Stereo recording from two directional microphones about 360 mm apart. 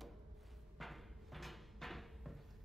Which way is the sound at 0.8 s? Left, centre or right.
Centre.